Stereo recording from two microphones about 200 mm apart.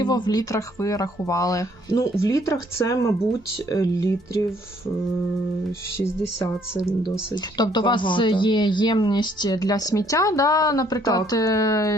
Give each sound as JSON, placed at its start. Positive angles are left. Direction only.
{"t": 0.0, "sound": "speech", "side_deg": 20}
{"t": 7.5, "sound": "speech", "side_deg": 20}